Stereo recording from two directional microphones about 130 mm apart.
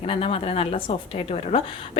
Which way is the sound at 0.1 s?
45° left (ahead or behind).